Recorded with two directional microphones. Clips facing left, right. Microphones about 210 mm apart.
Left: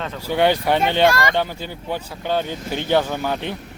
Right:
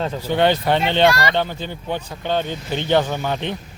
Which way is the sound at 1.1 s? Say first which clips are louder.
Even; 50° left (ahead or behind).